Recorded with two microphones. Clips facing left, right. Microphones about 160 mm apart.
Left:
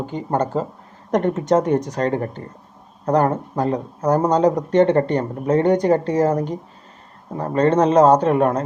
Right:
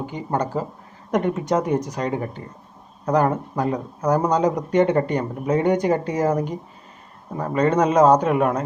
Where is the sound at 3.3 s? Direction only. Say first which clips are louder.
Left 2 dB; 30° left (ahead or behind).